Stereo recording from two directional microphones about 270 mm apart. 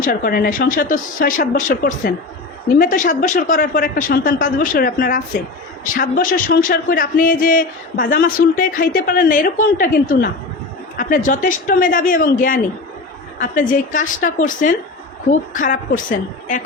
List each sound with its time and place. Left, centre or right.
0.0 s a man's voice: left